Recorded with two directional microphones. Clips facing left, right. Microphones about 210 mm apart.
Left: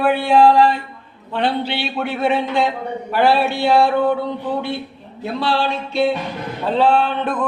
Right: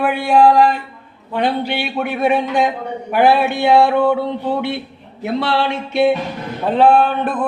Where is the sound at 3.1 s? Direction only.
15° right (ahead or behind).